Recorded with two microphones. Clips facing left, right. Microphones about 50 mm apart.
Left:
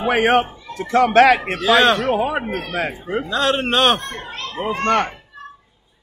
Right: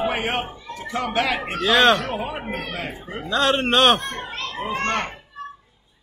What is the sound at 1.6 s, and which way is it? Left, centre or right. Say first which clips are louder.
Speech: left 1 dB; centre.